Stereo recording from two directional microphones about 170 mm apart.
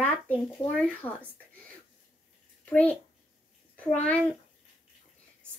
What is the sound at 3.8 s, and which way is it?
Speech, 10° left (ahead or behind).